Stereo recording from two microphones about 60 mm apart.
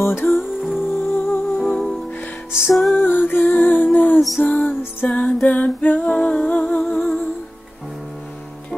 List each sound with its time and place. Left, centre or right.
0.0 s music: left
0.6 s music: centre
3.0 s music: left
5.4 s humming: left
6.1 s music: left